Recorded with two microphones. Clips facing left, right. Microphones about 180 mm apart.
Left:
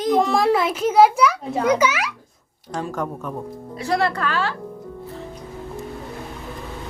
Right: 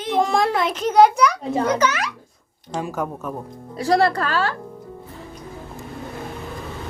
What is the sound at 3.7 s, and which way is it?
Speech, 35° right (ahead or behind).